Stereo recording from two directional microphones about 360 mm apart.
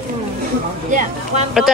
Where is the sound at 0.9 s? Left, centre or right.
Centre.